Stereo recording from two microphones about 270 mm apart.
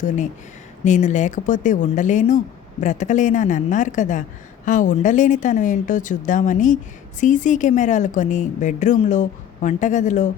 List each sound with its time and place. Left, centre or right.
0.9 s a woman's voice: left